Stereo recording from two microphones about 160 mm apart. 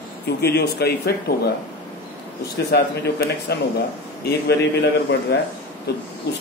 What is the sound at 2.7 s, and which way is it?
A man's voice, 90° left.